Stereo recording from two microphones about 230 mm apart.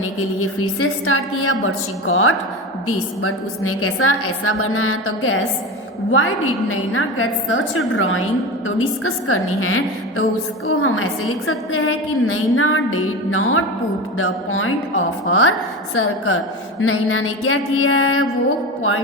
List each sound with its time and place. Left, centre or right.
0.3 s a woman's voice: left